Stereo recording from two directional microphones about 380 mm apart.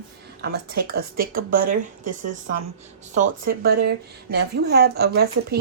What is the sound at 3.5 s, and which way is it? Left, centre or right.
Speech, right.